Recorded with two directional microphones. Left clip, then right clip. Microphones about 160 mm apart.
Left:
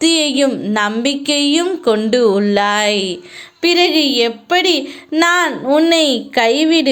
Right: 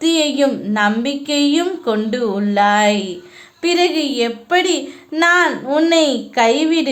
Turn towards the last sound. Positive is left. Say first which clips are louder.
# left 2 dB
turn(degrees=25)  # may be behind; listen again after turning